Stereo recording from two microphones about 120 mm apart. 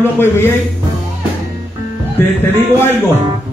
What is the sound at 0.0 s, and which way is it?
Speech, 20° left (ahead or behind).